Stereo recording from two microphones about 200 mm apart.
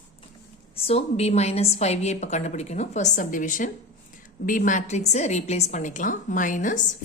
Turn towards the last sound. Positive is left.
turn(degrees=40)  # may be behind; listen again after turning